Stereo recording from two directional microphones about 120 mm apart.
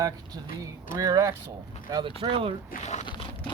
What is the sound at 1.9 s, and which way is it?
Speech, 45° right (ahead or behind).